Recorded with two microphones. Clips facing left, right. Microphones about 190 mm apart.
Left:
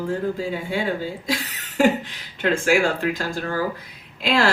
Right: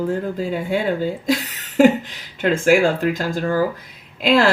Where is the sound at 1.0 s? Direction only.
45° right (ahead or behind).